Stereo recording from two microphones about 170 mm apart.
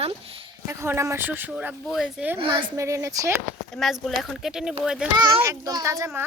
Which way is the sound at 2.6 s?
20° right (ahead or behind).